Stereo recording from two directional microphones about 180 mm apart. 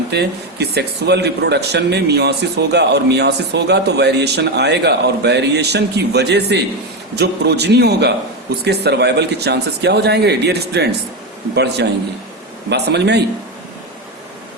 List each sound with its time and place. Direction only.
0.1 s a man's voice: 65° right (ahead or behind)